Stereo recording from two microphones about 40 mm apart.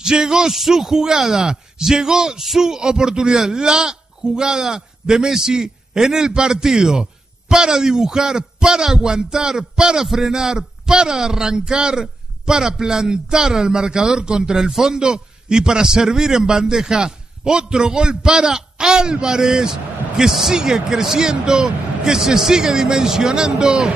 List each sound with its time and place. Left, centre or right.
0.0 s a man's voice: centre
10.0 s a man's voice: centre